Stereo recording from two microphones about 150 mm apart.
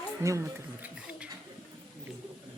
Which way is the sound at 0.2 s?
20° right (ahead or behind).